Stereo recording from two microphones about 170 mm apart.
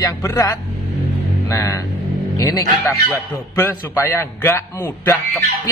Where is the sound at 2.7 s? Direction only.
10° left (ahead or behind).